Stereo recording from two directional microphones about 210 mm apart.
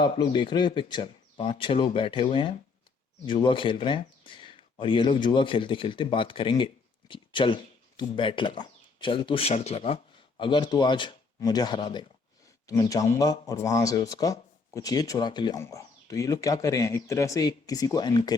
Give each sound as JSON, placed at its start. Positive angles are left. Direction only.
{"t": 0.0, "sound": "speech", "side_deg": 20}